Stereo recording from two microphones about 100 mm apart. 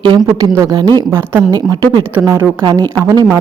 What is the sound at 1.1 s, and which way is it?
Speech, 20° right (ahead or behind).